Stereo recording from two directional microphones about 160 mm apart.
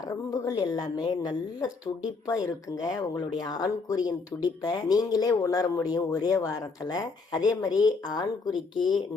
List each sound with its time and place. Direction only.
0.3 s speech: 25° left (ahead or behind)
2.9 s speech: 25° left (ahead or behind)